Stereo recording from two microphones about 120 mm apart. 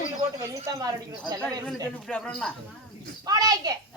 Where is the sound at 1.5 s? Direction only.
5° left (ahead or behind).